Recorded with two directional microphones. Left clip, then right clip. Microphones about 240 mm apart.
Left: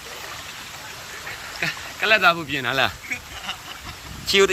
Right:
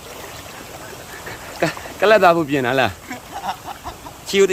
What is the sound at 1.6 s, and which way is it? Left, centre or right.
Speech, right.